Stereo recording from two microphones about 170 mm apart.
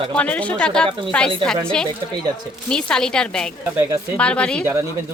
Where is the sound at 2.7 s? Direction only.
5° left (ahead or behind).